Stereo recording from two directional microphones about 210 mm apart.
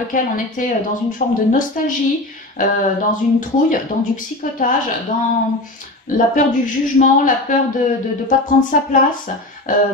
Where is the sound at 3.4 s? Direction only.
40° left (ahead or behind).